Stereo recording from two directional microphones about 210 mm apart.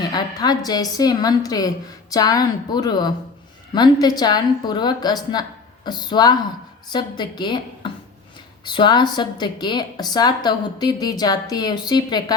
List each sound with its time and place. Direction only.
0.1 s a woman's voice: 20° left (ahead or behind)